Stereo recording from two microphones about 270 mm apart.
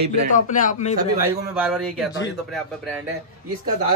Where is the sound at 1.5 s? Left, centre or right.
Centre.